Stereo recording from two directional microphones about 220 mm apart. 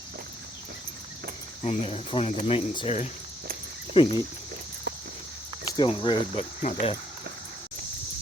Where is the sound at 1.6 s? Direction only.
25° left (ahead or behind).